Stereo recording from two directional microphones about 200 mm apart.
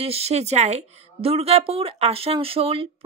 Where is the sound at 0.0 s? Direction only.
30° right (ahead or behind).